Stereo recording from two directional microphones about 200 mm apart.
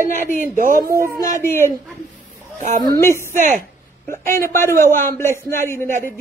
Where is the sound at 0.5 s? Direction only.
45° right (ahead or behind).